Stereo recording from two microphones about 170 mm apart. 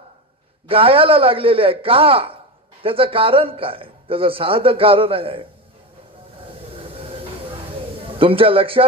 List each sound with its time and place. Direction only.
0.7 s a man's voice: 30° right (ahead or behind)
6.8 s train: 35° right (ahead or behind)
8.2 s a man's voice: 30° right (ahead or behind)